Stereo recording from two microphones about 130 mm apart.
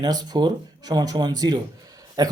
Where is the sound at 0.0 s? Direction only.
30° right (ahead or behind).